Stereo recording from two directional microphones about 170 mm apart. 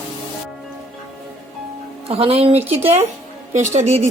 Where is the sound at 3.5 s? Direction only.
40° right (ahead or behind).